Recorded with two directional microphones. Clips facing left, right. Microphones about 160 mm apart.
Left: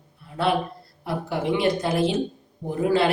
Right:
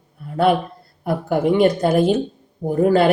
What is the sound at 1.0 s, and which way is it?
Speech, 50° right (ahead or behind).